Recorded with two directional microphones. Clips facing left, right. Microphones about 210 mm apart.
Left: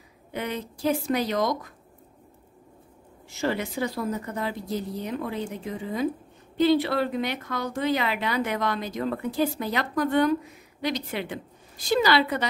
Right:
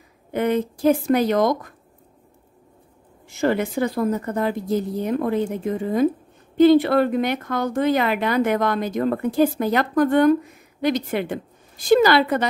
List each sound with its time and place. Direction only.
0.3 s speech: 50° right (ahead or behind)
3.3 s speech: 50° right (ahead or behind)